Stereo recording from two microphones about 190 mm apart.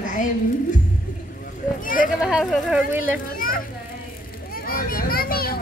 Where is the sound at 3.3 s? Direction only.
50° left (ahead or behind).